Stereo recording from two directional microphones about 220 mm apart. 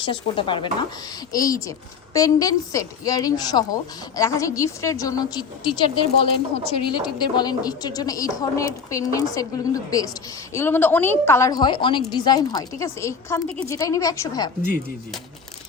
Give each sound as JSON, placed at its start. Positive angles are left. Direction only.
{"t": 0.0, "sound": "a woman's voice", "side_deg": 25}